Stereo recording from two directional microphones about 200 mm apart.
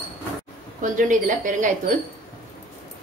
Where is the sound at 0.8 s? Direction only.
40° right (ahead or behind).